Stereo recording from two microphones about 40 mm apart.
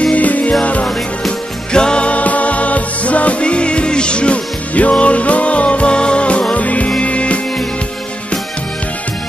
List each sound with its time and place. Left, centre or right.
0.1 s music: left
1.7 s music: left